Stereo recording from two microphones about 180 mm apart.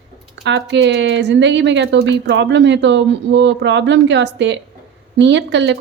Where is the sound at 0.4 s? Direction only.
80° right.